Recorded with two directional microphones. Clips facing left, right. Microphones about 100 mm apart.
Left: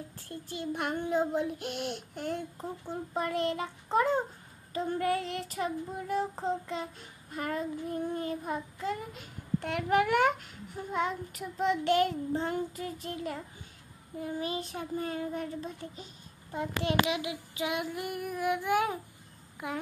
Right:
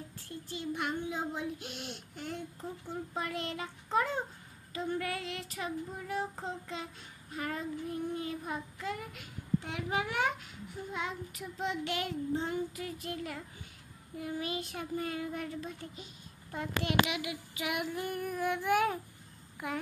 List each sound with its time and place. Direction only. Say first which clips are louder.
0.2 s a child's voice: left 2 dB; 50° left (ahead or behind)
3.2 s child singing: left 8 dB; 40° left (ahead or behind)
6.7 s a child's voice: left 5 dB; 45° left (ahead or behind)
9.6 s a child's voice: left 12 dB; 60° left (ahead or behind); by 13.4 s 35° left (ahead or behind)
14.2 s child singing: left 2 dB; 30° left (ahead or behind)
19.6 s a child's voice: left 1 dB; 20° left (ahead or behind)